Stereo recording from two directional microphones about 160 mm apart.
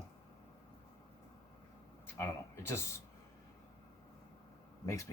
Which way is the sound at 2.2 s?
15° left (ahead or behind).